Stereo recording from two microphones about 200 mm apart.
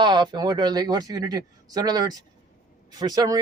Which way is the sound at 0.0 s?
20° right (ahead or behind).